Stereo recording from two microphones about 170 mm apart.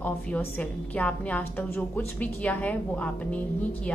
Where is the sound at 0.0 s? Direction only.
10° left (ahead or behind).